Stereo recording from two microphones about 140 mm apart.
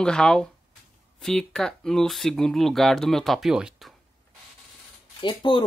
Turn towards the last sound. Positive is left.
turn(degrees=35)  # may be behind; listen again after turning